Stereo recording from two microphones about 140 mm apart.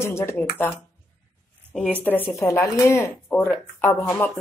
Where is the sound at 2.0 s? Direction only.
15° left (ahead or behind).